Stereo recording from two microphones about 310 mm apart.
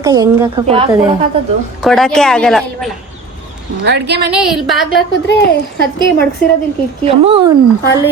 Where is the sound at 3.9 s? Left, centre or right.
Right.